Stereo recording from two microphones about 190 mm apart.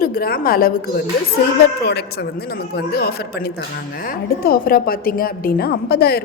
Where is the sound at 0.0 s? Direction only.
50° left (ahead or behind).